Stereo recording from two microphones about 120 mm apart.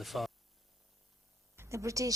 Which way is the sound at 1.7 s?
25° right (ahead or behind).